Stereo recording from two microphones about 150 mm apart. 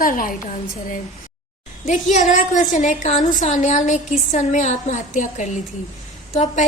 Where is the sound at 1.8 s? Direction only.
55° left (ahead or behind).